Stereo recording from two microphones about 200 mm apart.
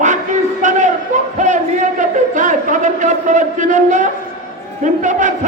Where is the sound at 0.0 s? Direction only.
40° right (ahead or behind).